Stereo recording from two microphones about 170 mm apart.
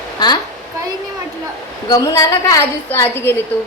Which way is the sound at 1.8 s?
20° left (ahead or behind).